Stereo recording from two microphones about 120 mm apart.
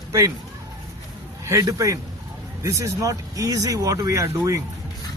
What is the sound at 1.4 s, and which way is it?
Speech, 25° right (ahead or behind).